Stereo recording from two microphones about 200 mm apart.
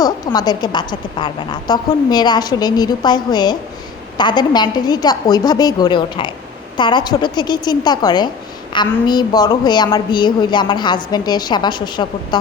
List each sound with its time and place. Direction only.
0.0 s a woman's voice: 20° left (ahead or behind)